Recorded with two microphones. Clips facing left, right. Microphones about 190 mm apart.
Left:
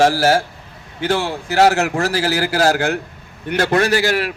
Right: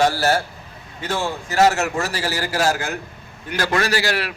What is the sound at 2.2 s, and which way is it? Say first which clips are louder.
A man's voice: left 4 dB; 65° left (ahead or behind).